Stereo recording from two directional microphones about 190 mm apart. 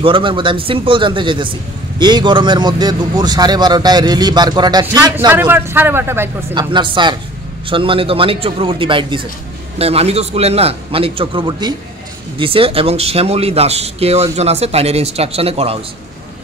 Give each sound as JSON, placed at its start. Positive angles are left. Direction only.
{"t": 0.0, "sound": "speech", "side_deg": -25}
{"t": 5.3, "sound": "speech", "side_deg": -10}
{"t": 6.5, "sound": "speech", "side_deg": -25}